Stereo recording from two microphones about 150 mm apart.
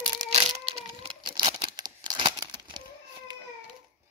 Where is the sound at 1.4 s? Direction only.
30° right (ahead or behind).